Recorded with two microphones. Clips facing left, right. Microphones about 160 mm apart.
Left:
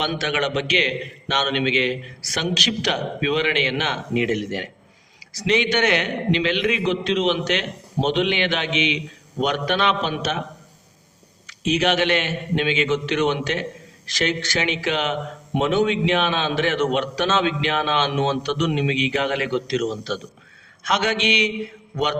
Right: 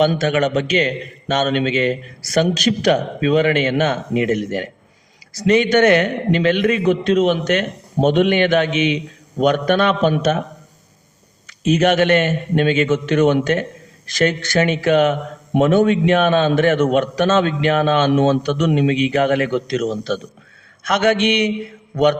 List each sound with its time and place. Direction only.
0.0 s speech: 45° right (ahead or behind)
11.4 s speech: 45° right (ahead or behind)